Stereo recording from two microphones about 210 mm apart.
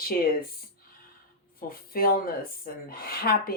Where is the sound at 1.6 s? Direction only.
45° left (ahead or behind).